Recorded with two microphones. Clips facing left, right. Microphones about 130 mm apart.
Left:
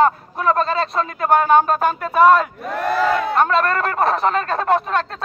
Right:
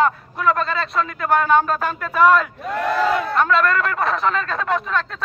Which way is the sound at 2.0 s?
30° left (ahead or behind).